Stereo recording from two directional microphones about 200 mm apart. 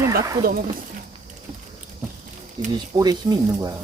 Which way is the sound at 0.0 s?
15° right (ahead or behind).